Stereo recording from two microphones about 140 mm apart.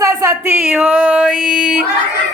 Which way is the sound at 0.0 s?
20° right (ahead or behind).